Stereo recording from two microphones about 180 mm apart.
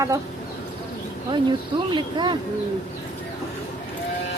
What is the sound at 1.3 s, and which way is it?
Speech, 25° right (ahead or behind).